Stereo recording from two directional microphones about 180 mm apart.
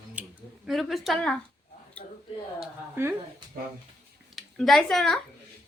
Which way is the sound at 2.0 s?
45° left (ahead or behind).